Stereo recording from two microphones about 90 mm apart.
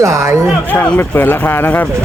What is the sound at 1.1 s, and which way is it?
Speech, 20° left (ahead or behind).